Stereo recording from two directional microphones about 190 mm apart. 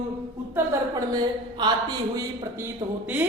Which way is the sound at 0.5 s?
20° right (ahead or behind).